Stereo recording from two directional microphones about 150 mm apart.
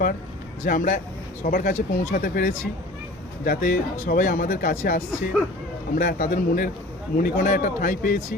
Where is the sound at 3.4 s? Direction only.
70° left (ahead or behind).